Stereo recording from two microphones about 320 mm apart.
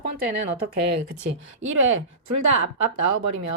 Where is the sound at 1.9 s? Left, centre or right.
Right.